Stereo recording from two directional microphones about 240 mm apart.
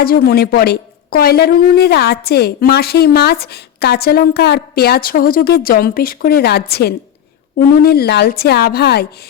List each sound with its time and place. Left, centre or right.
0.0 s a woman's voice: left